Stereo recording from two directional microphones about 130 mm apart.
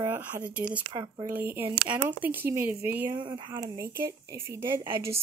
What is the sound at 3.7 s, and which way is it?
Speech, 25° right (ahead or behind).